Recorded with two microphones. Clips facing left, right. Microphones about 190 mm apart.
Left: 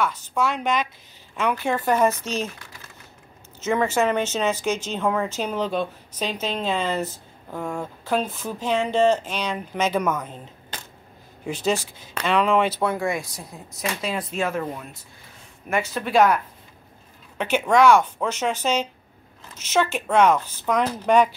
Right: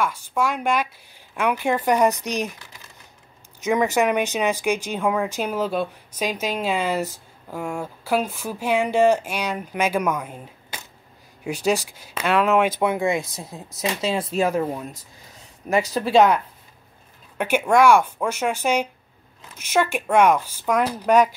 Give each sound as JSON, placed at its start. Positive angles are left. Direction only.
{"t": 0.0, "sound": "speech", "side_deg": -10}
{"t": 12.8, "sound": "speech", "side_deg": -20}
{"t": 14.5, "sound": "speech", "side_deg": -20}
{"t": 15.7, "sound": "speech", "side_deg": -35}
{"t": 17.4, "sound": "speech", "side_deg": -10}